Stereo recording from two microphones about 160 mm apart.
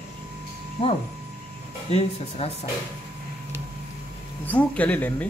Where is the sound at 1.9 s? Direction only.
40° left (ahead or behind).